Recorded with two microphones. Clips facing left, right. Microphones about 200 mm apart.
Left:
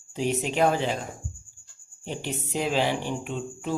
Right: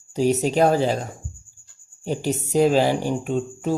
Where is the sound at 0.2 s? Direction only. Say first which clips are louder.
Right 6 dB; 40° right (ahead or behind).